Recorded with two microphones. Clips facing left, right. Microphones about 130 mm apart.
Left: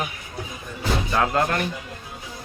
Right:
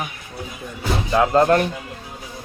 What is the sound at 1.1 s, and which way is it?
Speech, 25° right (ahead or behind).